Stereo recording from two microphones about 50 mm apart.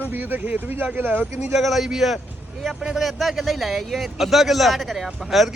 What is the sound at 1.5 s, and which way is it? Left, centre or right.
A man's voice, centre.